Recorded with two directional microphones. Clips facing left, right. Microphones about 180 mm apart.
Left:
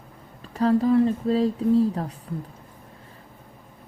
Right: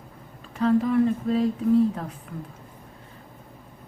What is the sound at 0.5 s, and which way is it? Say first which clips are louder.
Speech: left 2 dB; 35° left (ahead or behind).